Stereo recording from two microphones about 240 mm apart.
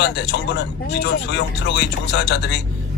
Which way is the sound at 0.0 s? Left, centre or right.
Left.